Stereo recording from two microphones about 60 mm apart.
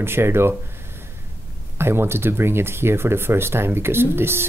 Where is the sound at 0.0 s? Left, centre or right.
Right.